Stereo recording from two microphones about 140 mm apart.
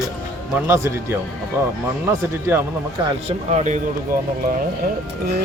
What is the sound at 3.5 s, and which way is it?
Speech, 55° right (ahead or behind).